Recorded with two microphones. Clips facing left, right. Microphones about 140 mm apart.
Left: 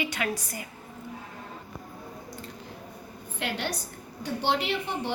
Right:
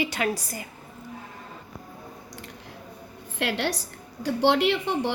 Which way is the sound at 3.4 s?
70° right (ahead or behind).